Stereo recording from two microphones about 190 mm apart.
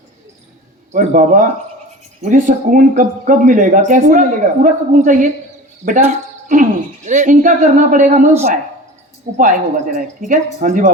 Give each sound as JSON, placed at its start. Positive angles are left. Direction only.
{"t": 0.9, "sound": "speech", "side_deg": -45}
{"t": 9.4, "sound": "speech", "side_deg": -45}